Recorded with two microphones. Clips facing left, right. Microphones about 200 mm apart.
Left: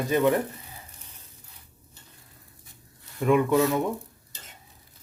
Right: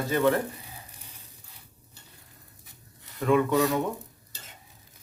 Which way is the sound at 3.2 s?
15° left (ahead or behind).